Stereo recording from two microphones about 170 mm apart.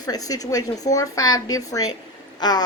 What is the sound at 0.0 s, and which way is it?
Speech, 20° left (ahead or behind).